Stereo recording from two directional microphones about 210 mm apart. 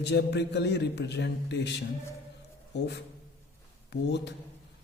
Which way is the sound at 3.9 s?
55° left (ahead or behind).